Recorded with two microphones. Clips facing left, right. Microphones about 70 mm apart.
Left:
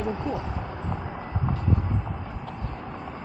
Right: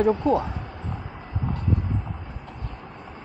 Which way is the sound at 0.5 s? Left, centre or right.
Centre.